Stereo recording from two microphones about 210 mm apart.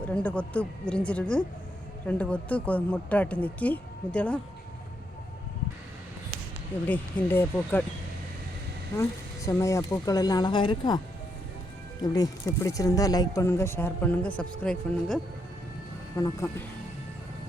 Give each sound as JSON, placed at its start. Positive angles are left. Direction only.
{"t": 0.0, "sound": "a woman's voice", "side_deg": 5}
{"t": 6.8, "sound": "speech", "side_deg": 10}
{"t": 9.0, "sound": "speech", "side_deg": 15}
{"t": 12.1, "sound": "speech", "side_deg": 15}